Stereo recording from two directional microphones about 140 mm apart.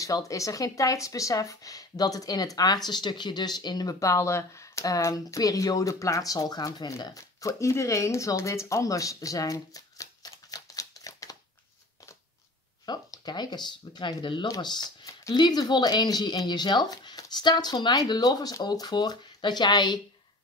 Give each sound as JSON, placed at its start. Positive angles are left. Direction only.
{"t": 0.0, "sound": "speech", "side_deg": 25}
{"t": 12.8, "sound": "speech", "side_deg": 30}